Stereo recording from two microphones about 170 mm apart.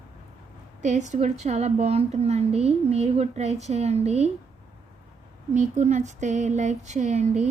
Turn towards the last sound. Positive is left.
turn(degrees=-40)  # may be behind; listen again after turning